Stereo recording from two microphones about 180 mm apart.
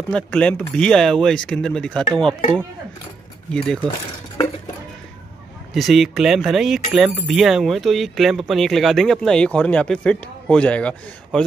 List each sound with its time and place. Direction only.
0.1 s speech: 5° left (ahead or behind)
3.5 s speech: 5° left (ahead or behind)
5.8 s speech: centre (ahead or behind)